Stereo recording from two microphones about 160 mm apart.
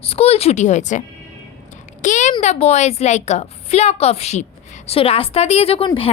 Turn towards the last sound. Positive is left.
turn(degrees=35)  # may be behind; listen again after turning